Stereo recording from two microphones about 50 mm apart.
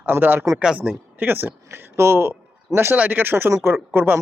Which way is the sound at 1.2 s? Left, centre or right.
Right.